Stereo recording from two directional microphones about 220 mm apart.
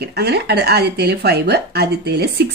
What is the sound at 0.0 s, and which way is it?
Speech, 45° right (ahead or behind).